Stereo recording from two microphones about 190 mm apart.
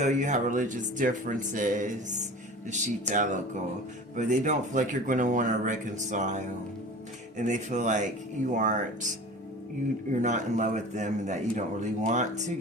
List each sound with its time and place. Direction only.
0.0 s a man's voice: 40° right (ahead or behind)
10.1 s a man's voice: 40° right (ahead or behind)